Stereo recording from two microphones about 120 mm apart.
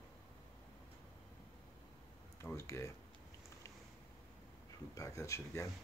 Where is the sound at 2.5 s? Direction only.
25° left (ahead or behind).